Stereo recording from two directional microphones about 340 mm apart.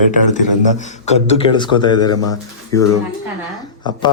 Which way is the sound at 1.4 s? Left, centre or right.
Centre.